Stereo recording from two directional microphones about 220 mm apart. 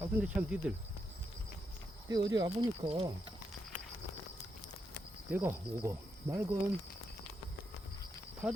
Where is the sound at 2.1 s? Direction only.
20° right (ahead or behind).